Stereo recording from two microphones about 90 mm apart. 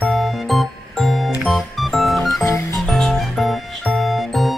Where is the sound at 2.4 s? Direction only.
35° left (ahead or behind).